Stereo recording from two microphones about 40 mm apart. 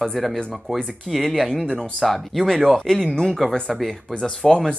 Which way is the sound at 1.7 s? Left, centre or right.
Centre.